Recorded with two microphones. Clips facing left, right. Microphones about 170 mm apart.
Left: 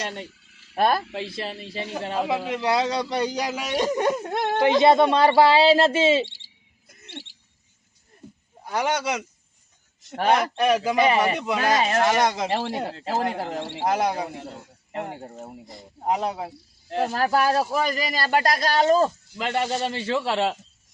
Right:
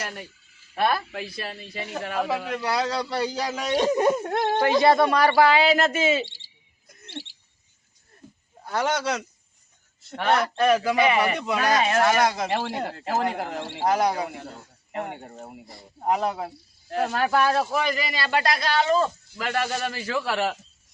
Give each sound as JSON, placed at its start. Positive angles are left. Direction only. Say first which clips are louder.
{"t": 0.5, "sound": "a sound", "louder": "left 5 dB", "side_deg": 70}
{"t": 0.8, "sound": "a man's voice", "louder": "left 2 dB", "side_deg": 40}
{"t": 1.1, "sound": "a man's voice", "louder": "left 3 dB", "side_deg": 25}
{"t": 3.8, "sound": "whimper", "louder": "right 2 dB", "side_deg": -5}
{"t": 4.6, "sound": "a man's voice", "louder": "left 3 dB", "side_deg": 20}
{"t": 6.2, "sound": "bird", "louder": "left 2 dB", "side_deg": 60}
{"t": 7.0, "sound": "bird", "louder": "right 2 dB", "side_deg": 20}
{"t": 8.6, "sound": "a man's voice", "louder": "even", "side_deg": 15}
{"t": 10.2, "sound": "a man's voice", "louder": "even", "side_deg": 15}
{"t": 10.9, "sound": "a man's voice", "louder": "left 1 dB", "side_deg": 35}
{"t": 13.2, "sound": "whimper", "louder": "even", "side_deg": 5}
{"t": 15.6, "sound": "a man's voice", "louder": "right 1 dB", "side_deg": 20}
{"t": 17.2, "sound": "speech", "louder": "left 1 dB", "side_deg": 35}
{"t": 19.4, "sound": "a man's voice", "louder": "left 2 dB", "side_deg": 25}